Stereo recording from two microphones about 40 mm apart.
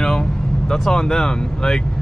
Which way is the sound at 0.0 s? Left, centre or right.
Centre.